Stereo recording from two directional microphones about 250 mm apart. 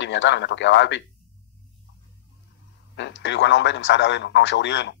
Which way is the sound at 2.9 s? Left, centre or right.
Left.